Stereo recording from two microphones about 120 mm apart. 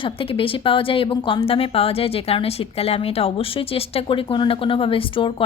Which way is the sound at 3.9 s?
45° left (ahead or behind).